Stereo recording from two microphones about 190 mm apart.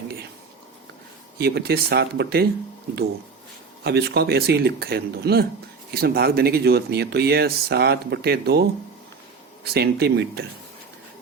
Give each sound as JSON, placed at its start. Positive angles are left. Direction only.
{"t": 1.4, "sound": "speech", "side_deg": -55}
{"t": 3.8, "sound": "speech", "side_deg": -60}
{"t": 9.7, "sound": "speech", "side_deg": -55}